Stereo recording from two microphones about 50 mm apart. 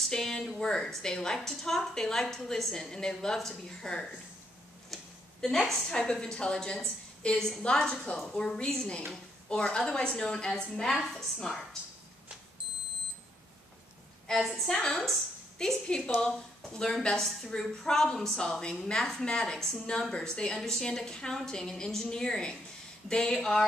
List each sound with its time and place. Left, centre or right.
0.0 s a woman's voice: centre
4.9 s a woman's voice: centre
14.2 s a woman's voice: centre